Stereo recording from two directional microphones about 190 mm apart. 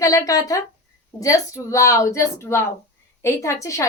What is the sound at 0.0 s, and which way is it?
A woman's voice, 15° left (ahead or behind).